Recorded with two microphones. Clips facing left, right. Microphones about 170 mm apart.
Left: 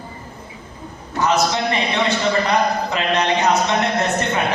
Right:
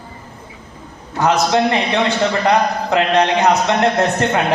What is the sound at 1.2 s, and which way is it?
A man's voice, 65° right (ahead or behind).